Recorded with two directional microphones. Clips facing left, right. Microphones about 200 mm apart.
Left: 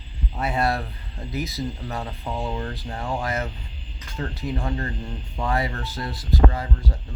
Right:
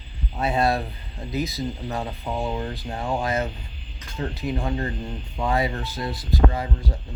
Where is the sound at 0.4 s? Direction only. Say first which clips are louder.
Right 2 dB; 20° right (ahead or behind).